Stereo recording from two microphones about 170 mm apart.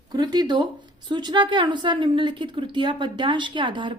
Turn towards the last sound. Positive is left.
turn(degrees=-30)  # may be behind; listen again after turning